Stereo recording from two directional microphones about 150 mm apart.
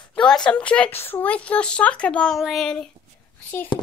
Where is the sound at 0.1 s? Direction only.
5° left (ahead or behind).